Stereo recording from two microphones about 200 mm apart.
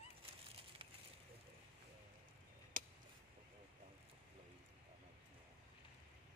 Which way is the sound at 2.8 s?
40° right (ahead or behind).